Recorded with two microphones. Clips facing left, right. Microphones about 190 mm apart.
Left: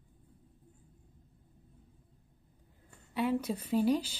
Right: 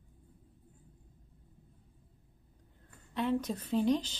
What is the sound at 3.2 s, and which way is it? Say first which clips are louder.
A woman's voice: left 1 dB; 10° left (ahead or behind).